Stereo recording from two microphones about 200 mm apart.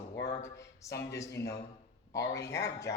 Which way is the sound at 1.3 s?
55° left (ahead or behind).